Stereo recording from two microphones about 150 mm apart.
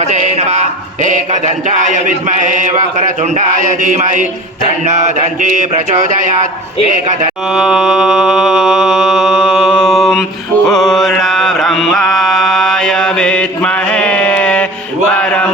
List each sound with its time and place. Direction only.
0.1 s mantra: 50° right (ahead or behind)
7.5 s mantra: 5° right (ahead or behind)
15.1 s a sound: 10° left (ahead or behind)